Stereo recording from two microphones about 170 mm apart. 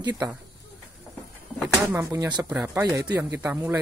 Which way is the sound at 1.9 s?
15° right (ahead or behind).